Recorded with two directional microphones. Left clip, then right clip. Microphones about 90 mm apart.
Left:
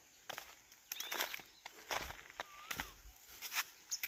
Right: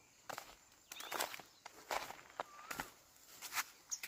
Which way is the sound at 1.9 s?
30° right (ahead or behind).